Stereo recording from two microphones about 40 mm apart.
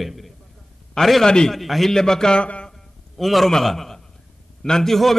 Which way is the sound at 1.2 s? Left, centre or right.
Centre.